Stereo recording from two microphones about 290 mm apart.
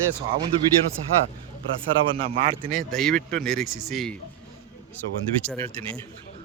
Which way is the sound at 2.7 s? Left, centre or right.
Centre.